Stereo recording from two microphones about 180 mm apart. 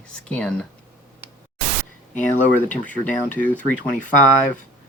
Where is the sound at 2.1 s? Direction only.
10° left (ahead or behind).